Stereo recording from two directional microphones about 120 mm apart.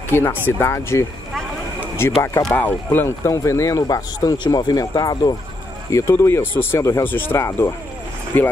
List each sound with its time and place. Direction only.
0.1 s speech: 20° left (ahead or behind)
2.5 s speech: 15° left (ahead or behind)